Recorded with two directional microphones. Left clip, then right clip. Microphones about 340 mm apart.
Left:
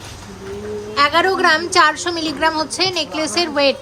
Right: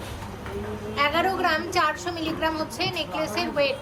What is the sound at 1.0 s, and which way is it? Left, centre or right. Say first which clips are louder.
A woman's voice: left 8 dB; left.